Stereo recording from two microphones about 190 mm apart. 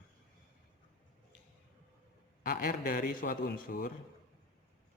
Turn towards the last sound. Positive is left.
turn(degrees=50)  # may be behind; listen again after turning